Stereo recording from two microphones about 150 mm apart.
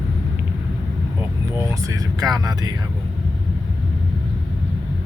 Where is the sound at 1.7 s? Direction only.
20° right (ahead or behind).